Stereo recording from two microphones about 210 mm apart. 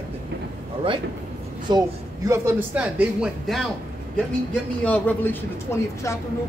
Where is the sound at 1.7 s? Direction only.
20° right (ahead or behind).